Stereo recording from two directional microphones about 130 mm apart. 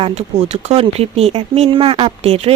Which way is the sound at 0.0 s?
60° right (ahead or behind).